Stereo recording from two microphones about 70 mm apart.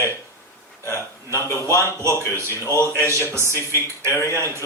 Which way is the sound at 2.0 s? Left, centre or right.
Right.